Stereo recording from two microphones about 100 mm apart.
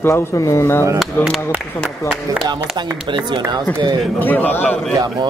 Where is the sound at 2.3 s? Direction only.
35° right (ahead or behind).